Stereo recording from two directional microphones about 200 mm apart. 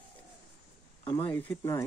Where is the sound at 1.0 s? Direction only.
10° left (ahead or behind).